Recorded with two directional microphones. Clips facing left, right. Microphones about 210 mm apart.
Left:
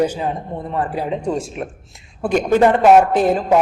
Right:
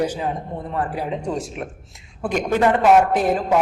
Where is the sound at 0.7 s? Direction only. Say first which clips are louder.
Left 3 dB; 25° left (ahead or behind).